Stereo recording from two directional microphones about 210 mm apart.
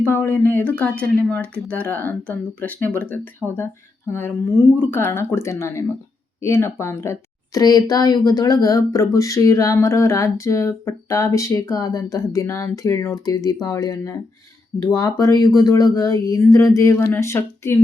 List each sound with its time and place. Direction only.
0.0 s a woman's voice: 10° left (ahead or behind)